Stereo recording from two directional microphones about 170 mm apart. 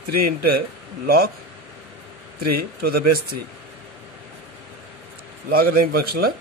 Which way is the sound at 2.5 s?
65° right (ahead or behind).